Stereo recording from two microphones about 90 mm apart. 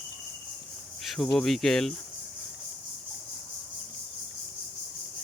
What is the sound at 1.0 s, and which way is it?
Cricket, centre (ahead or behind).